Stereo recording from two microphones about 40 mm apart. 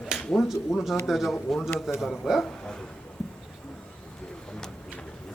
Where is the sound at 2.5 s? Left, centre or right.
Centre.